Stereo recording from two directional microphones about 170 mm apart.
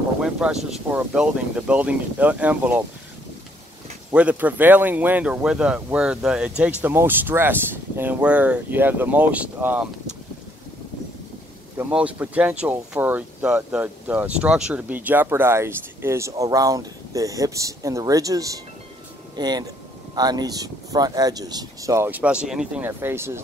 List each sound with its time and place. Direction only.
0.2 s speech: 5° right (ahead or behind)
4.1 s speech: 10° right (ahead or behind)
11.8 s speech: 10° right (ahead or behind)